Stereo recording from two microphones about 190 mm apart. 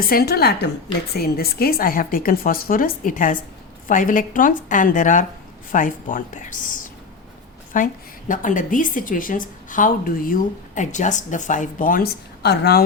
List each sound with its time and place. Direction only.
0.0 s a woman's voice: 50° left (ahead or behind)
7.7 s a woman's voice: 45° left (ahead or behind)